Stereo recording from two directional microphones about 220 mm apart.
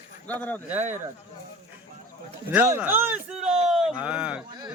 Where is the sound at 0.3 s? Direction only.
5° left (ahead or behind).